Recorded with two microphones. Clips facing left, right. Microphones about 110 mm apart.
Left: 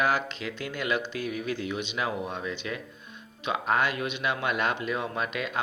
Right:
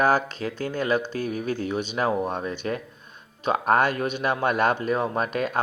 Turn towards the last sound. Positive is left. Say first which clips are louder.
# right 6 dB
turn(degrees=-45)  # may be behind; listen again after turning